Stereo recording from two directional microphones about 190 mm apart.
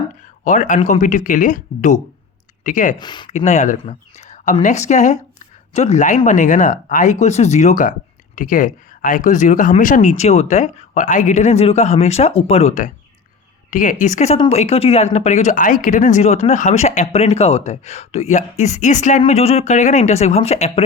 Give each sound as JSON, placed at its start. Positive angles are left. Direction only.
{"t": 0.4, "sound": "speech", "side_deg": 40}
{"t": 3.0, "sound": "speech", "side_deg": 25}
{"t": 3.2, "sound": "speech", "side_deg": 40}